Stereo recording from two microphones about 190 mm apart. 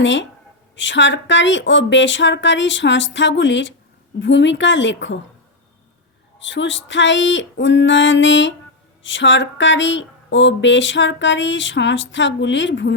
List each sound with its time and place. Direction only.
0.0 s speech: 75° left (ahead or behind)
6.4 s speech: 75° left (ahead or behind)